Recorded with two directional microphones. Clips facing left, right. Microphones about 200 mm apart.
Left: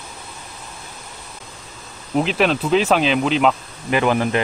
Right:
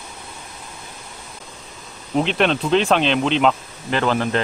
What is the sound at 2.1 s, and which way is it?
Speech, 5° left (ahead or behind).